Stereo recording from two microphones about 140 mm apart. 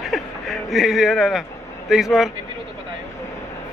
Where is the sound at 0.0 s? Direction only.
Centre (ahead or behind).